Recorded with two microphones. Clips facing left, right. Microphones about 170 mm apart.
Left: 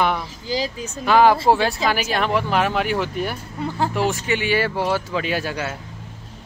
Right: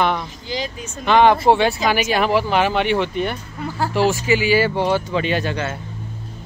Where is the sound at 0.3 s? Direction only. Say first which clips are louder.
Left 2 dB; 35° left (ahead or behind).